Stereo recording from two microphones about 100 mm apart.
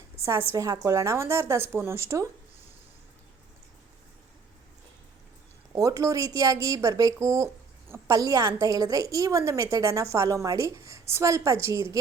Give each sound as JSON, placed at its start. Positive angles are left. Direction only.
{"t": 0.5, "sound": "a woman's voice", "side_deg": -35}
{"t": 5.7, "sound": "a woman's voice", "side_deg": -35}